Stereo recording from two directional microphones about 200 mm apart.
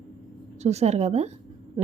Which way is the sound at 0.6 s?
35° right (ahead or behind).